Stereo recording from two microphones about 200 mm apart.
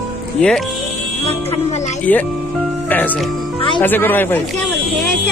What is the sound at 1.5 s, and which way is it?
Music, 35° left (ahead or behind).